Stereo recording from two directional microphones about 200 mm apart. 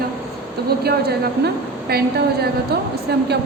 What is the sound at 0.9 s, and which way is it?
A woman's voice, 50° right (ahead or behind).